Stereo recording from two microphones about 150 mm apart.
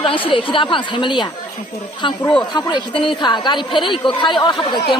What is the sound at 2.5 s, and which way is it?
A woman's voice, 30° left (ahead or behind).